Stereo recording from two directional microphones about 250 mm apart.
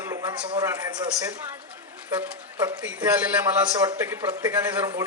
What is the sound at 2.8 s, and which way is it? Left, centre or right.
A man's voice, centre.